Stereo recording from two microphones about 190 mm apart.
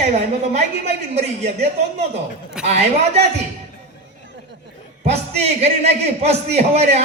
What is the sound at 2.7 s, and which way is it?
Speech, 35° right (ahead or behind).